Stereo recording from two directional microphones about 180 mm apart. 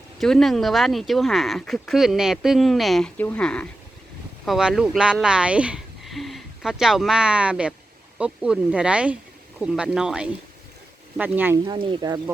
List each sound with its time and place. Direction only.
0.2 s speech: 5° left (ahead or behind)
11.6 s speech: 30° right (ahead or behind)